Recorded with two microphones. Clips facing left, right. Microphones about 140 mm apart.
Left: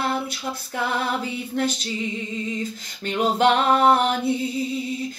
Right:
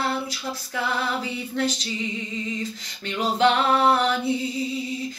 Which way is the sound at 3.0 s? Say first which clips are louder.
Left 1 dB; 45° left (ahead or behind).